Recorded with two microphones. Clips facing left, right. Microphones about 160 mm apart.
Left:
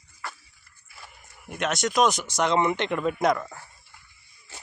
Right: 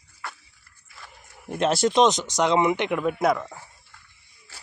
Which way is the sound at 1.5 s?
30° right (ahead or behind).